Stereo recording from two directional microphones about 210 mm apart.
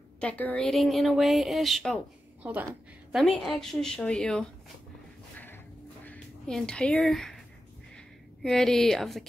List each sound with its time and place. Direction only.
0.2 s a woman's voice: 5° left (ahead or behind)
6.0 s music: 5° left (ahead or behind)
7.9 s a sound: centre (ahead or behind)